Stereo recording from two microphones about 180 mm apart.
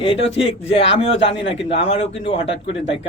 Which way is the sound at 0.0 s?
35° left (ahead or behind).